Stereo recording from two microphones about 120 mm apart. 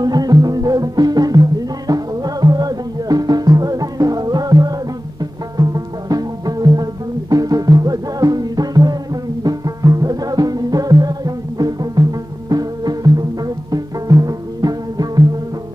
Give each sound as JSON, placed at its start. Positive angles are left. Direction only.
{"t": 0.0, "sound": "music", "side_deg": -35}